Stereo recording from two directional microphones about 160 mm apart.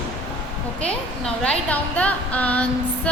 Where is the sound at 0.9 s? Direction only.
5° left (ahead or behind).